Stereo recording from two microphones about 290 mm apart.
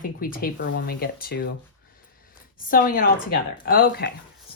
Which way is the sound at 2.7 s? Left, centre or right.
Left.